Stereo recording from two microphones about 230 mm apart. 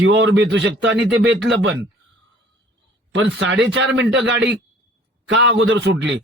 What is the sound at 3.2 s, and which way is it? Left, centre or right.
A man's voice, right.